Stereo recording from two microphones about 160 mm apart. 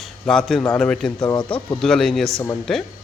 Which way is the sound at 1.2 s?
30° left (ahead or behind).